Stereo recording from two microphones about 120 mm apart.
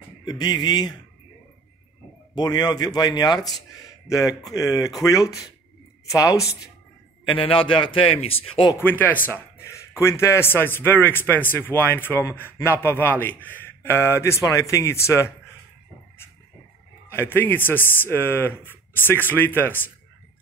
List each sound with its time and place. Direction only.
0.2 s a man's voice: 35° left (ahead or behind)
2.3 s a man's voice: 35° left (ahead or behind)
7.2 s a man's voice: 45° left (ahead or behind)
8.7 s a man's voice: 15° left (ahead or behind)
17.1 s speech: 20° left (ahead or behind)